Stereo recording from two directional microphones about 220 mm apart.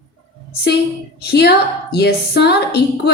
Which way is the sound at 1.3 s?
50° left (ahead or behind).